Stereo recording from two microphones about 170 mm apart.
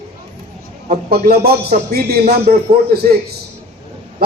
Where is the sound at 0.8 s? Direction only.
65° right (ahead or behind).